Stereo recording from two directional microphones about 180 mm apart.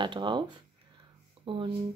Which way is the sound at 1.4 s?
30° right (ahead or behind).